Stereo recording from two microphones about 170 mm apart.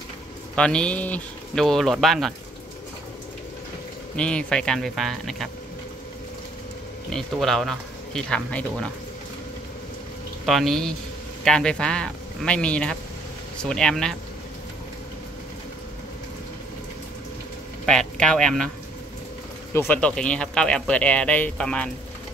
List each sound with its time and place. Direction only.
0.6 s speech: 5° left (ahead or behind)
4.2 s speech: 5° left (ahead or behind)
7.1 s speech: centre (ahead or behind)
10.4 s speech: centre (ahead or behind)
18.2 s speech: 5° left (ahead or behind)
19.7 s speech: 15° left (ahead or behind)